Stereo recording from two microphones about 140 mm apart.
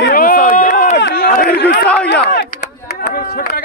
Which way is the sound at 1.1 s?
80° left.